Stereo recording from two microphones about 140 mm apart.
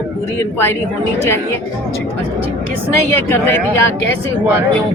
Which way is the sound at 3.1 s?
15° left (ahead or behind).